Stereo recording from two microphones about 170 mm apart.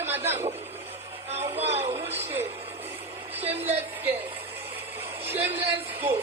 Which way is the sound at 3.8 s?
10° right (ahead or behind).